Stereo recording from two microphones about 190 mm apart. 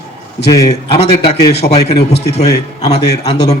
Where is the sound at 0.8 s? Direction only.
30° left (ahead or behind).